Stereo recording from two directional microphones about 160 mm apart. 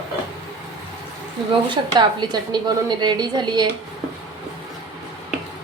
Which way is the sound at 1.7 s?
25° right (ahead or behind).